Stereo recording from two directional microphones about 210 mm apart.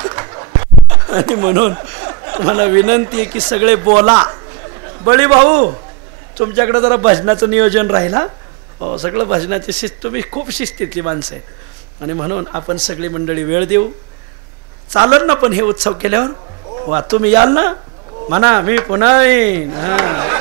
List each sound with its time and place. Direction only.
0.0 s a sound: 20° right (ahead or behind)
1.0 s a man's voice: 20° right (ahead or behind)
14.9 s speech: 25° right (ahead or behind)